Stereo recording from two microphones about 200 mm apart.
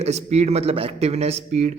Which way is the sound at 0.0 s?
35° right (ahead or behind).